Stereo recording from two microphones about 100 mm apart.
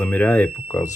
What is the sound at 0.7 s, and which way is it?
Speech, 30° left (ahead or behind).